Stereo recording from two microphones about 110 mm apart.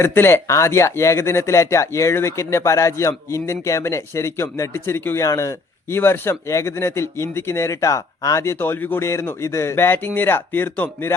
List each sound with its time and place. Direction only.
0.0 s speech: 20° left (ahead or behind)